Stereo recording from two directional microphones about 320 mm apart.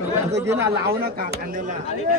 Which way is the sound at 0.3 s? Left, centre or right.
Centre.